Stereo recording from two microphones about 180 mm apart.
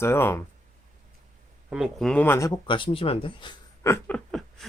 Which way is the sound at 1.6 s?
5° right (ahead or behind).